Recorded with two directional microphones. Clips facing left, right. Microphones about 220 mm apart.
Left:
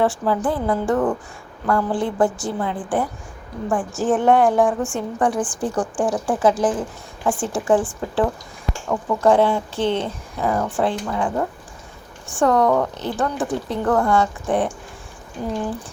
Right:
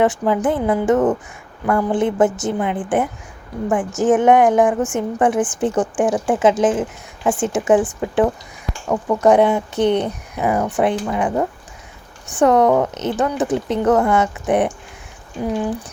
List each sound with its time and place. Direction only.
0.0 s speech: 20° right (ahead or behind)